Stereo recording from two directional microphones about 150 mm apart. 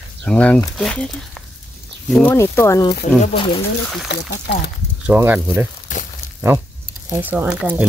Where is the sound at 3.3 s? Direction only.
35° left (ahead or behind).